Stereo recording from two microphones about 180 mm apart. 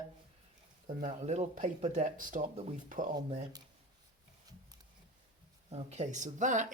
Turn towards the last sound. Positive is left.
turn(degrees=-45)  # may be behind; listen again after turning